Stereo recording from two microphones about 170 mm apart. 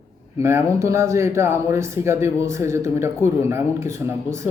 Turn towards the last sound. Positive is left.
turn(degrees=-15)  # may be behind; listen again after turning